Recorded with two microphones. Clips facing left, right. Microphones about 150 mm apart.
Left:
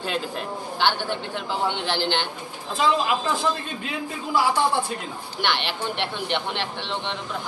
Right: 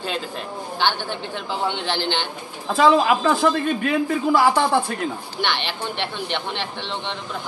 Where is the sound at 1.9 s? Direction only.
5° left (ahead or behind).